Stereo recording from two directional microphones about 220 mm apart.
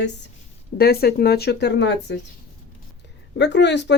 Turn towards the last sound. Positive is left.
turn(degrees=50)  # may be behind; listen again after turning